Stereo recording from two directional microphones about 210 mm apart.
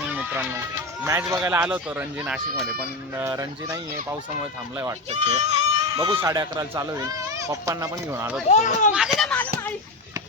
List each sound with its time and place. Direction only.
0.1 s music: 5° right (ahead or behind)
1.0 s speech: 15° right (ahead or behind)
5.1 s goat: 30° right (ahead or behind)
6.0 s speech: 15° right (ahead or behind)
8.4 s speech: 35° left (ahead or behind)
9.1 s a sound: 5° left (ahead or behind)